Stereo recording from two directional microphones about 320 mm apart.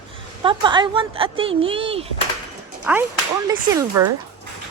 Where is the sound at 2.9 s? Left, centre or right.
Centre.